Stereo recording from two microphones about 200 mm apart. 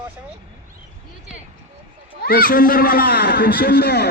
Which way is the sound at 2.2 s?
45° left (ahead or behind).